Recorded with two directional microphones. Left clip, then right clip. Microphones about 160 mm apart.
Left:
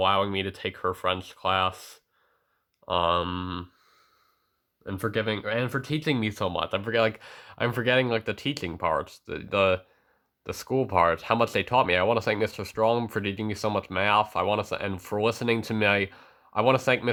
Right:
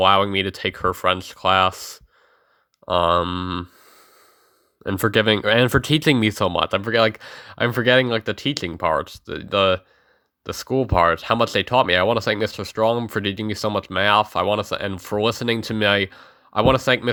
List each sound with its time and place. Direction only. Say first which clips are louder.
0.0 s speech: right 8 dB; 30° right (ahead or behind)